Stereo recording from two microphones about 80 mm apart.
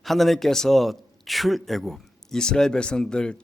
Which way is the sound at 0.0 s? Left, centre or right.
Centre.